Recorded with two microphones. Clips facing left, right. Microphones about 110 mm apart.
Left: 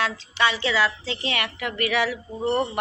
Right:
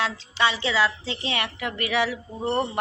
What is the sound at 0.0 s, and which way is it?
A woman's voice, 20° right (ahead or behind).